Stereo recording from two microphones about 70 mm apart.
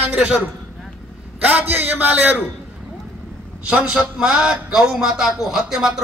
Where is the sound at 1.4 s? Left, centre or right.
Right.